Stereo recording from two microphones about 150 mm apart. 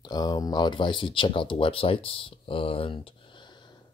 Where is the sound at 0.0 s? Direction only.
25° left (ahead or behind).